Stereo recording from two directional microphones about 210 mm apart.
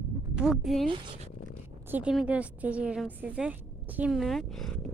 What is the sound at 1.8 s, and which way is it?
A woman's voice, 5° right (ahead or behind).